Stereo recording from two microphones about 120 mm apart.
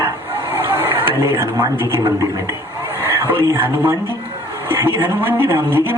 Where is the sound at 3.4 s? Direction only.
20° right (ahead or behind).